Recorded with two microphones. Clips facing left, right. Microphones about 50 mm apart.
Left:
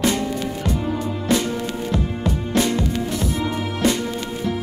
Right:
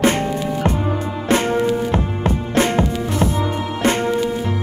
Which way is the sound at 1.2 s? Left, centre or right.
Right.